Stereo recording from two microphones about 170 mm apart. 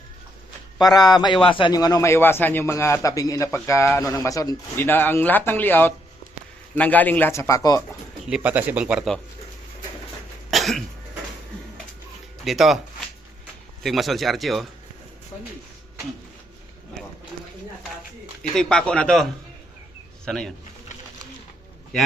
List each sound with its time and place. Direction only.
1.2 s a man's voice: 30° left (ahead or behind)
8.3 s speech: 10° right (ahead or behind)
10.5 s cough: centre (ahead or behind)
12.5 s speech: centre (ahead or behind)
13.8 s speech: centre (ahead or behind)
18.5 s speech: 5° left (ahead or behind)